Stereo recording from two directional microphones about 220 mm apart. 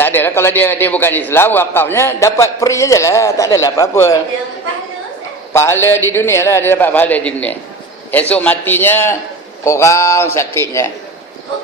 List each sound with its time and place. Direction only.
0.0 s a man's voice: 10° left (ahead or behind)
5.5 s a man's voice: 10° left (ahead or behind)